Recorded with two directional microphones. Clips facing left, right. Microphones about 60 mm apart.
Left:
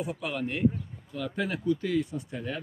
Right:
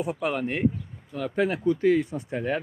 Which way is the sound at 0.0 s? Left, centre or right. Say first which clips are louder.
Right 5 dB; right.